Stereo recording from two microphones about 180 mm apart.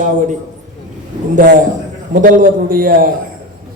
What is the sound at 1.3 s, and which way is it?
A man's voice, 45° right (ahead or behind).